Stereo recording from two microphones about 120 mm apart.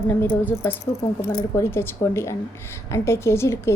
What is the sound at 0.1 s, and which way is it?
A woman's voice, 15° left (ahead or behind).